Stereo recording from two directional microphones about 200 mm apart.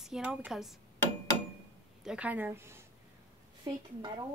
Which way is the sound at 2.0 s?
5° right (ahead or behind).